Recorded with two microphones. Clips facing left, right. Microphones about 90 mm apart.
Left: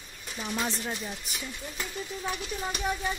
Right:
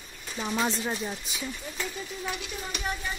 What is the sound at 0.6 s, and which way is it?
Speech, 15° right (ahead or behind).